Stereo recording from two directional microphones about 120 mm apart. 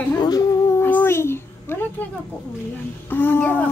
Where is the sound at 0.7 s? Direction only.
20° left (ahead or behind).